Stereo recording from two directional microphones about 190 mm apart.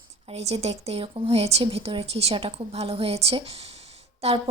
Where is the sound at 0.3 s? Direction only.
35° right (ahead or behind).